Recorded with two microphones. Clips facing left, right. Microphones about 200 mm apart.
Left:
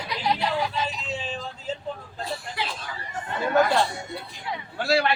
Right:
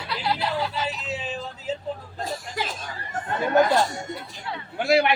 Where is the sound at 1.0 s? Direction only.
5° right (ahead or behind).